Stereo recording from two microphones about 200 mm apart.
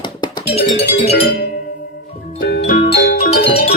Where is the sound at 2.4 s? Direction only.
50° left (ahead or behind).